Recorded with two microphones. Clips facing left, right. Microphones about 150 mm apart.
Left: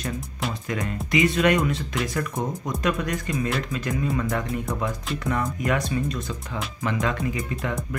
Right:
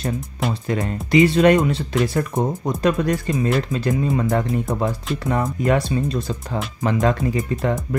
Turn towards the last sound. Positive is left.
turn(degrees=-25)  # may be behind; listen again after turning